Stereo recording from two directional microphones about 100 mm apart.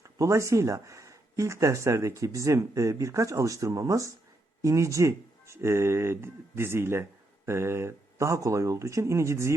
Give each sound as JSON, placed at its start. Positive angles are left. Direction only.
{"t": 0.0, "sound": "speech", "side_deg": -30}